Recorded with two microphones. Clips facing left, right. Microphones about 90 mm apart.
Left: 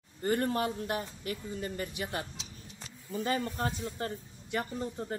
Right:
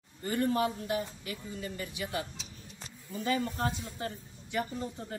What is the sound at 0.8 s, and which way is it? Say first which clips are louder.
A woman's voice: right 1 dB; 45° left (ahead or behind).